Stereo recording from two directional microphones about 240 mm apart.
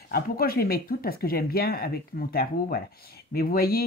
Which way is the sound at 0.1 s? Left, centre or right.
Left.